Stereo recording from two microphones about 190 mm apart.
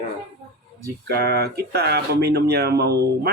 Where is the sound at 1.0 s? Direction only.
55° right (ahead or behind).